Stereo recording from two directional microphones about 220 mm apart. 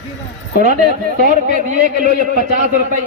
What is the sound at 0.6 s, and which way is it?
A man's voice, 35° right (ahead or behind).